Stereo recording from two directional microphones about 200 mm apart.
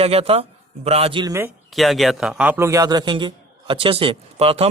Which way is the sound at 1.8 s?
Centre (ahead or behind).